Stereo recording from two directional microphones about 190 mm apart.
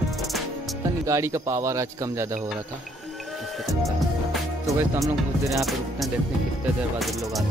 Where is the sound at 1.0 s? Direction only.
15° right (ahead or behind).